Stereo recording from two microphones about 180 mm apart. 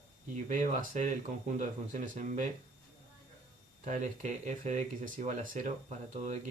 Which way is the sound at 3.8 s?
40° right (ahead or behind).